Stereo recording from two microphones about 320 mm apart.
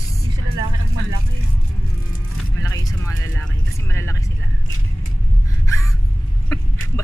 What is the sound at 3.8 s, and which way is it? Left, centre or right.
Vehicle, centre.